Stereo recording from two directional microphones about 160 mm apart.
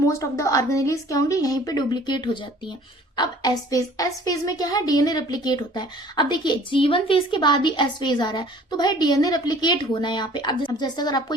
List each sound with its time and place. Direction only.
0.0 s a woman's voice: 20° left (ahead or behind)